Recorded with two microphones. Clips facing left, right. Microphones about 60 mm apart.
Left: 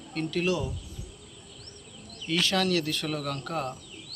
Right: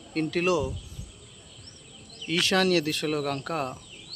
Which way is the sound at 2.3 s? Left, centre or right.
Right.